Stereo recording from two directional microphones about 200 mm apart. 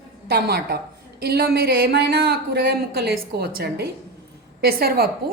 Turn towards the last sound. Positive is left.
turn(degrees=-50)  # may be behind; listen again after turning